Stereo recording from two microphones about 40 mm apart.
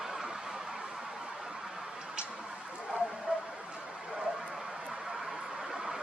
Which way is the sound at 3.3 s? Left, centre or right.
Right.